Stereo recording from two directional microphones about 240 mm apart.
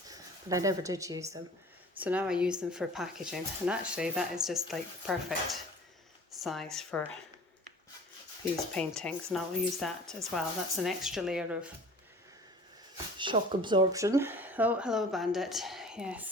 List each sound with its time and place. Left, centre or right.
0.1 s speech: centre
8.5 s speech: centre
13.1 s speech: centre